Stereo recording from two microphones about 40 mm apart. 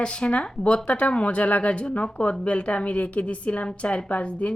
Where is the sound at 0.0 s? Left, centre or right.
Left.